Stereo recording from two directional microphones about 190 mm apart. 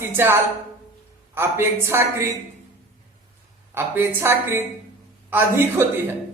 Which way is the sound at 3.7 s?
10° right (ahead or behind).